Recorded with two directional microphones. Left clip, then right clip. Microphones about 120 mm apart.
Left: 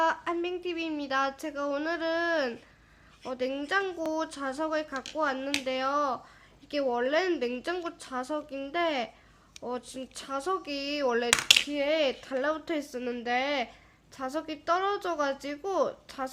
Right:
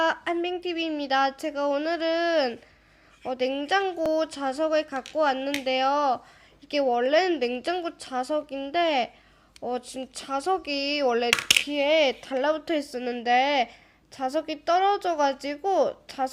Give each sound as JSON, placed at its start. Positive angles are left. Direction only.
{"t": 0.0, "sound": "speech", "side_deg": -30}
{"t": 11.7, "sound": "speech", "side_deg": -35}